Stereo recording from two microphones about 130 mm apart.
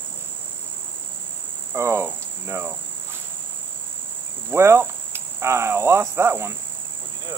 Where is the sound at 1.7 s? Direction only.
20° right (ahead or behind).